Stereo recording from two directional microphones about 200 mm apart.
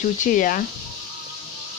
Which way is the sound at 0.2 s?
40° left (ahead or behind).